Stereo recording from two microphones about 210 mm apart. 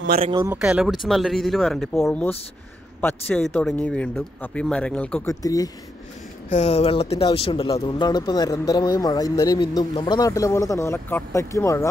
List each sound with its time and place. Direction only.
0.2 s speech: 20° right (ahead or behind)
0.5 s speech: 5° right (ahead or behind); by 5.7 s 15° left (ahead or behind)
6.5 s speech: 30° left (ahead or behind); by 11.9 s 15° left (ahead or behind)